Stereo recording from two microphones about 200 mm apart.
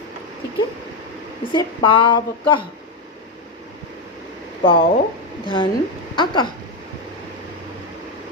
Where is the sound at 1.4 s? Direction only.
25° left (ahead or behind).